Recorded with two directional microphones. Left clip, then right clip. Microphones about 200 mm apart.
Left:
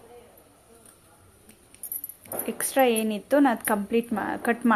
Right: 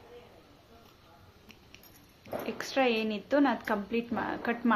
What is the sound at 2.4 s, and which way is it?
Speech, 30° left (ahead or behind).